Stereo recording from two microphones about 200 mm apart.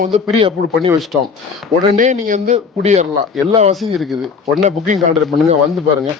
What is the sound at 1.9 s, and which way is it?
Speech, 40° right (ahead or behind).